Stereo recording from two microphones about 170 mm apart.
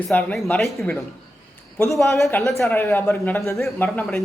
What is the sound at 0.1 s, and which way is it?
Speech, 5° left (ahead or behind).